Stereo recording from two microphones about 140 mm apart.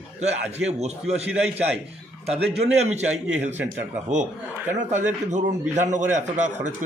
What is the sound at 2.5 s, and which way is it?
Speech, 50° right (ahead or behind).